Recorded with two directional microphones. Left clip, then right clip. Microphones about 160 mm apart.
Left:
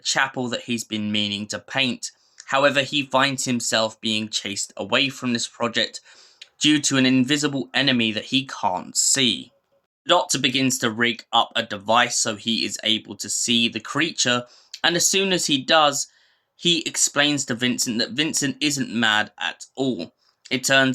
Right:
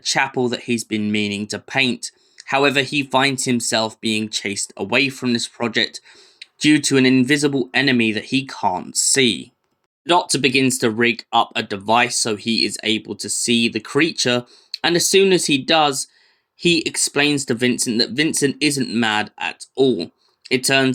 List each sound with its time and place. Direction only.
0.0 s speech: 15° right (ahead or behind)